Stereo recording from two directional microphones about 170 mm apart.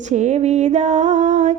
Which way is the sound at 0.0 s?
45° right (ahead or behind).